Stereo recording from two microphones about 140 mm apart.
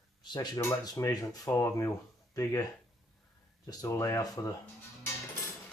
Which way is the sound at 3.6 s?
20° left (ahead or behind).